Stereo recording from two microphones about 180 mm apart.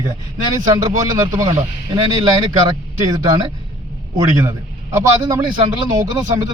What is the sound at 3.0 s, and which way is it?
Speech, 20° right (ahead or behind).